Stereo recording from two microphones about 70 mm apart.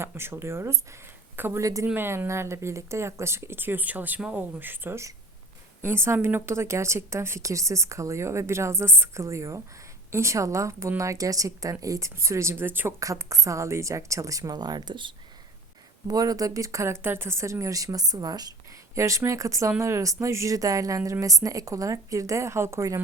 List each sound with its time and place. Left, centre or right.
0.0 s a woman's voice: right
13.0 s a woman's voice: right
14.5 s speech: right
16.0 s a woman's voice: right
18.9 s a woman's voice: right